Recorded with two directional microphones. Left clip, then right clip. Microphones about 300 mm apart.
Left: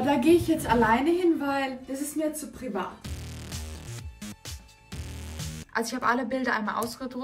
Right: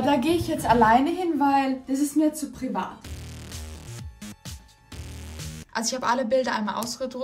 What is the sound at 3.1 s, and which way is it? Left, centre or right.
Music, centre.